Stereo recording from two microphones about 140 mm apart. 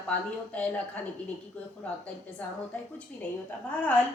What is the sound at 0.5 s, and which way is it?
Speech, 10° left (ahead or behind).